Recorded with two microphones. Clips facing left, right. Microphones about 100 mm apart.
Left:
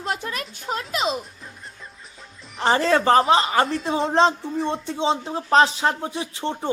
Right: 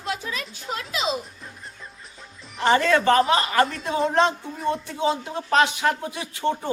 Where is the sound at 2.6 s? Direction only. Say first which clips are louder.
Even; 30° left (ahead or behind).